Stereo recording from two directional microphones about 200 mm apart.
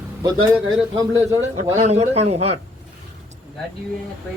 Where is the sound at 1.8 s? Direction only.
30° right (ahead or behind).